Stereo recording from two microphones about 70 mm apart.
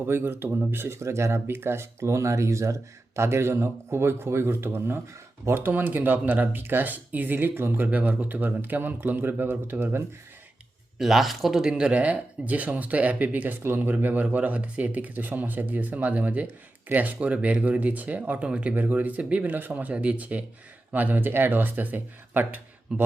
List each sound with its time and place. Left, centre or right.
0.0 s speech: right
7.9 s speech: right
10.9 s speech: centre; by 23.0 s right